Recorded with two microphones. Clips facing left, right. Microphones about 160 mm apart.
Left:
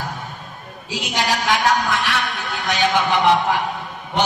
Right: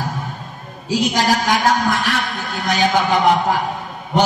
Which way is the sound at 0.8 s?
40° right (ahead or behind).